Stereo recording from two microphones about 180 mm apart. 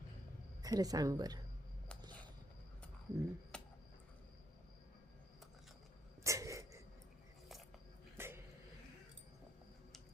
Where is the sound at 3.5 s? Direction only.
5° left (ahead or behind).